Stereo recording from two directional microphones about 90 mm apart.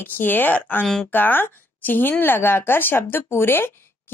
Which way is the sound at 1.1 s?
20° left (ahead or behind).